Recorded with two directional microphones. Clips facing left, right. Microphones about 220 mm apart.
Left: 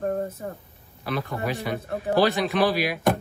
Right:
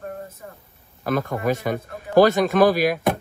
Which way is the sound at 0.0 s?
40° left (ahead or behind).